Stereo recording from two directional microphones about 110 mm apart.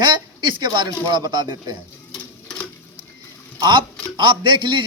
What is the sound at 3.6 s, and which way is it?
A man's voice, 40° right (ahead or behind).